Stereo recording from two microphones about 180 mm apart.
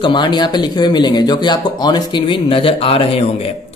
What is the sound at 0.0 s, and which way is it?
A man's voice, 25° left (ahead or behind).